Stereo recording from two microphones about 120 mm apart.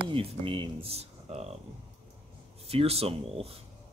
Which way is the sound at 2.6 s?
55° right (ahead or behind).